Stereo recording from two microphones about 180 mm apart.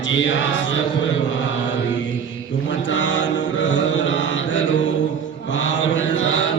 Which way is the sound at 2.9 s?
90° left.